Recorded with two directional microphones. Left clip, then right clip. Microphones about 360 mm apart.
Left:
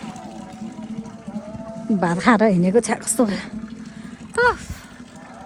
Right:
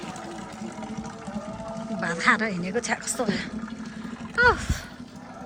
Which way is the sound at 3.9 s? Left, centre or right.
Centre.